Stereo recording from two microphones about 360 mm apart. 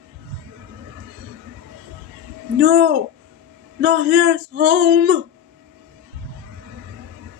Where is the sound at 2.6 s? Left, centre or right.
Right.